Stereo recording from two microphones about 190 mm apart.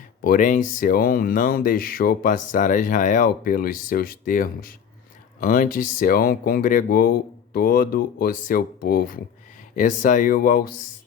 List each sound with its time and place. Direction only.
0.3 s speech: 45° left (ahead or behind)